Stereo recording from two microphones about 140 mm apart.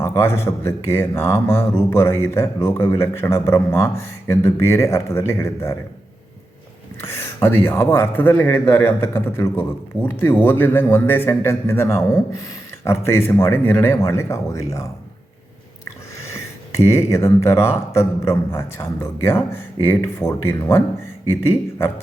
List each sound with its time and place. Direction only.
0.0 s speech: 20° left (ahead or behind)
7.0 s speech: 20° left (ahead or behind)
16.3 s speech: 20° left (ahead or behind)